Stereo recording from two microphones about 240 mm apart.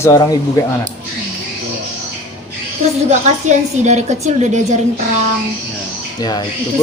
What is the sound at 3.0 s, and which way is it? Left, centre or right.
A woman's voice, right.